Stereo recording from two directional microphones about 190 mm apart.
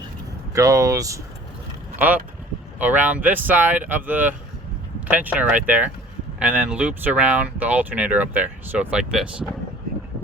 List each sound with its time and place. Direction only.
0.5 s speech: 15° right (ahead or behind)